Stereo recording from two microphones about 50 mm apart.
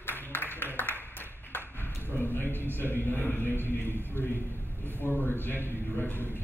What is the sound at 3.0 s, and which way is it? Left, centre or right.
Speech, left.